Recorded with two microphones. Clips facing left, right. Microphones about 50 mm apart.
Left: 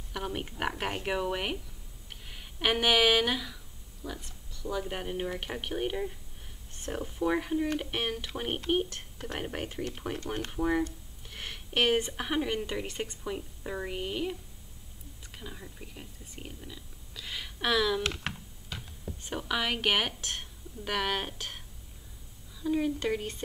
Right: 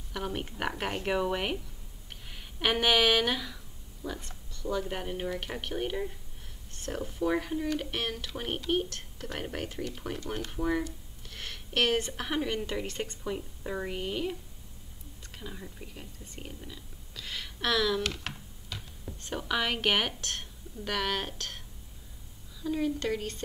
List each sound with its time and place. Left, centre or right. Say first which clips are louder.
0.1 s a woman's voice: right 1 dB; centre
10.1 s speech: left 1 dB; left
10.5 s a woman's voice: left 2 dB; centre
15.3 s speech: right 2 dB; centre
18.0 s a sound: left 1 dB; left
18.8 s speech: left 2 dB; centre